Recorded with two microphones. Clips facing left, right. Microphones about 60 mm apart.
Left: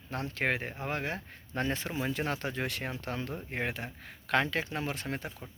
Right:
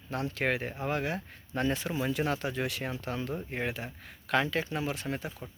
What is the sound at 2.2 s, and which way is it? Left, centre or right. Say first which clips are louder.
Speech: right 2 dB; left.